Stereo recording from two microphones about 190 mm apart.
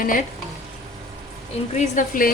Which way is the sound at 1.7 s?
40° left (ahead or behind).